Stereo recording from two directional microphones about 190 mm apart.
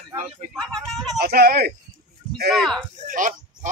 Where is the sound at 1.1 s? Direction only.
55° right (ahead or behind).